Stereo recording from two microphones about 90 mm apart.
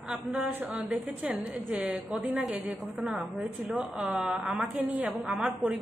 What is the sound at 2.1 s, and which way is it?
A woman's voice, 5° right (ahead or behind).